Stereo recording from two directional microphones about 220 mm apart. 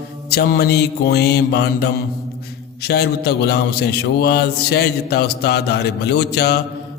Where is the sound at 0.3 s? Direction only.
45° left (ahead or behind).